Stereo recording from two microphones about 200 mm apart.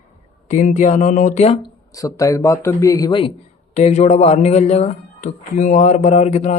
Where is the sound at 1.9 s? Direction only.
15° left (ahead or behind).